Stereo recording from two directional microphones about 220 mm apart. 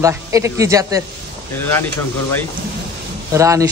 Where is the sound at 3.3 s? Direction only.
15° right (ahead or behind).